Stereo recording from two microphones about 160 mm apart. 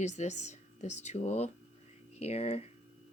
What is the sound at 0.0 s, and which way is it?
Speech, 45° left (ahead or behind).